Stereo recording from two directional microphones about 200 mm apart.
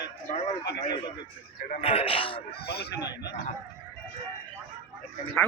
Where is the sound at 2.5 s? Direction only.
50° left (ahead or behind).